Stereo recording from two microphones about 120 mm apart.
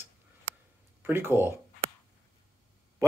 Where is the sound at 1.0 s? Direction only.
20° right (ahead or behind).